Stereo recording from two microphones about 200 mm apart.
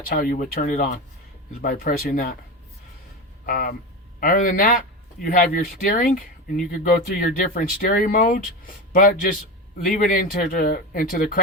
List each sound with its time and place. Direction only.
0.1 s speech: 45° left (ahead or behind)
3.4 s speech: 45° left (ahead or behind)